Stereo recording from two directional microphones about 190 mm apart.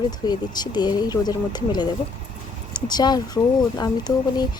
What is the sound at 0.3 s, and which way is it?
Speech, 20° left (ahead or behind).